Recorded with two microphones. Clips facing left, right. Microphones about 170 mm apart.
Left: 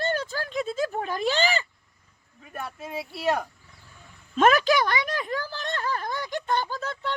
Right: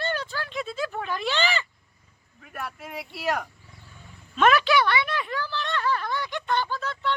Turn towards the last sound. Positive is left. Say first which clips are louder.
# right 2 dB
turn(degrees=45)  # may be behind; listen again after turning